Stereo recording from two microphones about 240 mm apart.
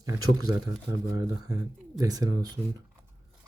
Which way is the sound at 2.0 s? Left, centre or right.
Centre.